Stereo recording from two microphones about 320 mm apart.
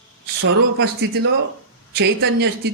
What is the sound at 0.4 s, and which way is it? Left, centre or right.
Speech, right.